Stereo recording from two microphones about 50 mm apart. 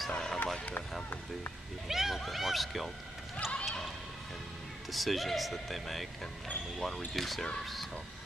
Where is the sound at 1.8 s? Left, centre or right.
Centre.